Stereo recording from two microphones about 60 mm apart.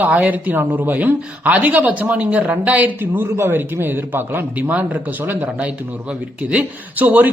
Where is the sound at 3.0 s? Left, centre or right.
Right.